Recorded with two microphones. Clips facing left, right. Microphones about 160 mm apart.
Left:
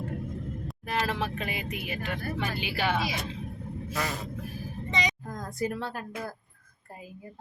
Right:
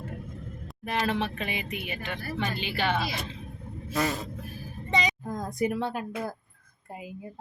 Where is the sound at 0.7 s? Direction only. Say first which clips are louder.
Right 3 dB; centre (ahead or behind).